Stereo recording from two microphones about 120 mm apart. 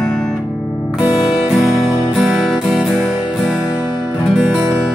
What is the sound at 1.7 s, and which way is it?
Music, centre (ahead or behind).